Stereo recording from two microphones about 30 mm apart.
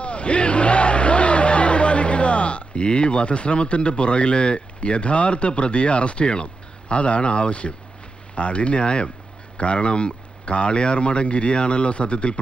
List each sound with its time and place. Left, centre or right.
0.0 s speech: left